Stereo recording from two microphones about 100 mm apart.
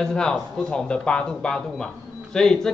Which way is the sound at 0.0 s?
5° left (ahead or behind).